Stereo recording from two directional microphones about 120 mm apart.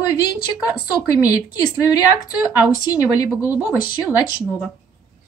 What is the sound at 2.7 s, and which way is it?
Speech, 30° left (ahead or behind).